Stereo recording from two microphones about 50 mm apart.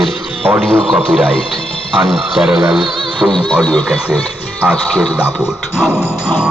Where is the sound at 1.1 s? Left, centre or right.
Right.